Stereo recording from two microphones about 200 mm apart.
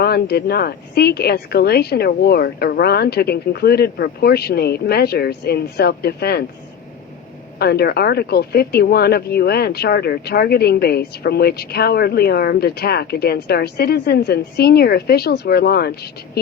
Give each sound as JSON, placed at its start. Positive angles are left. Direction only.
{"t": 0.0, "sound": "speech", "side_deg": 50}
{"t": 7.6, "sound": "speech", "side_deg": 50}